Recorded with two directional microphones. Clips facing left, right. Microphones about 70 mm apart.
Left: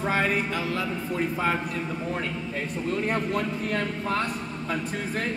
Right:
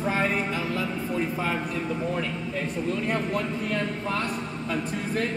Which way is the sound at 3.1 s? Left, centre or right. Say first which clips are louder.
Even; left.